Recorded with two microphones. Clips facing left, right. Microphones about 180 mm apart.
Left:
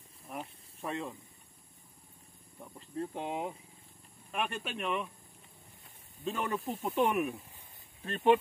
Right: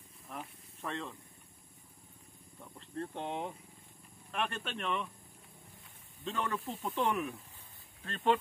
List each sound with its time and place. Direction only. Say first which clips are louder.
0.7 s speech: left 3 dB; 10° left (ahead or behind)
2.6 s speech: left 3 dB; 5° left (ahead or behind)
6.2 s speech: left 2 dB; 15° left (ahead or behind)